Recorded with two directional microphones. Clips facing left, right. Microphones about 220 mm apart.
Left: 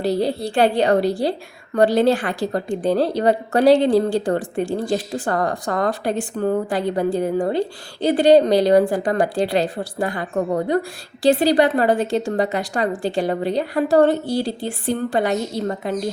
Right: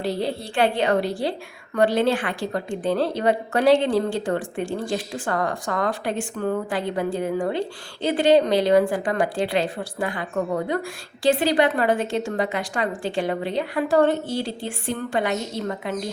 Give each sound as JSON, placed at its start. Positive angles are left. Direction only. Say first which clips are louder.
{"t": 0.0, "sound": "a woman's voice", "louder": "left 5 dB", "side_deg": 40}